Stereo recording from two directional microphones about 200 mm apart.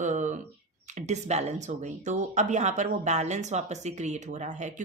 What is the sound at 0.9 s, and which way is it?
Speech, 35° right (ahead or behind).